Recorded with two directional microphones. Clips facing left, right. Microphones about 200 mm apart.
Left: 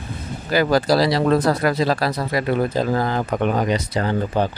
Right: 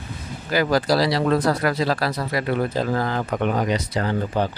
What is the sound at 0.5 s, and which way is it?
Speech, 30° left (ahead or behind).